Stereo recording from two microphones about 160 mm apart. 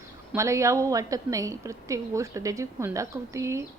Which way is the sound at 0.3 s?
20° right (ahead or behind).